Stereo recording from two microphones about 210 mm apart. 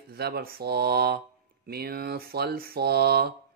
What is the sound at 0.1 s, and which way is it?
Speech, 50° right (ahead or behind).